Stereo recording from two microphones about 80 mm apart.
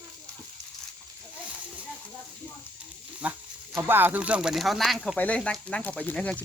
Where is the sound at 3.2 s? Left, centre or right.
Centre.